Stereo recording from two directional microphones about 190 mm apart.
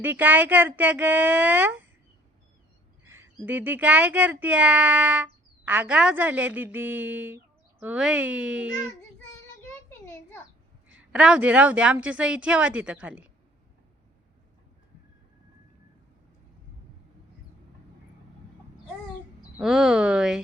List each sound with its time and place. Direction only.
0.0 s speech: 10° right (ahead or behind)
3.0 s a sound: 10° right (ahead or behind)
3.4 s speech: 10° right (ahead or behind)
10.9 s speech: 5° right (ahead or behind)
19.5 s speech: centre (ahead or behind)